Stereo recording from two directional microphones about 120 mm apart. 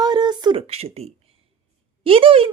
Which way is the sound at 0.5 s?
55° right (ahead or behind).